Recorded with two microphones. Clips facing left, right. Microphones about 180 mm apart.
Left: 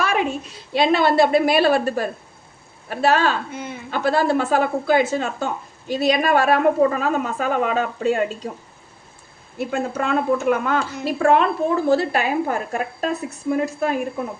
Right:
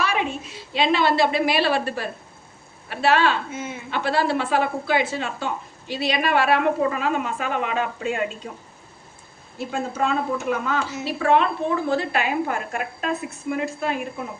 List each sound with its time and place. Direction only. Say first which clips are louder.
0.0 s a sound: left 3 dB; 45° left (ahead or behind)
0.8 s speech: left 3 dB; 45° left (ahead or behind)
3.5 s speech: even; 5° right (ahead or behind)
3.9 s speech: left 4 dB; 45° left (ahead or behind)
9.6 s a woman's voice: left 2 dB; 55° left (ahead or behind)
11.0 s a woman's voice: left 3 dB; 45° left (ahead or behind)